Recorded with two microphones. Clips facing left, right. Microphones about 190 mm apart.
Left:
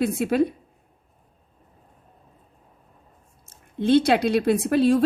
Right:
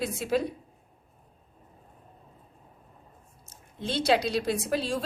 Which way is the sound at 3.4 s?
55° left (ahead or behind).